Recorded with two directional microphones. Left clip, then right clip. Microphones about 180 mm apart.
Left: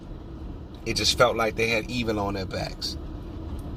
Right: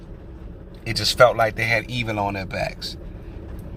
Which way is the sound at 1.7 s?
20° right (ahead or behind).